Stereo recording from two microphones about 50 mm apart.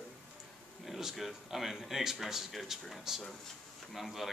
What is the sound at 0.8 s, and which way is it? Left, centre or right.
Speech, centre.